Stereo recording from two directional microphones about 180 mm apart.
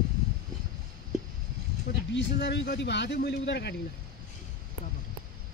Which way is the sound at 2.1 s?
75° left (ahead or behind).